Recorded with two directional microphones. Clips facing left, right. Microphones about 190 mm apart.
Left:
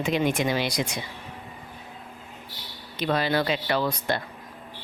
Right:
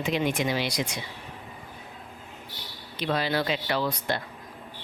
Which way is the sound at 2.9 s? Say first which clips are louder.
Left 2 dB; 50° left (ahead or behind).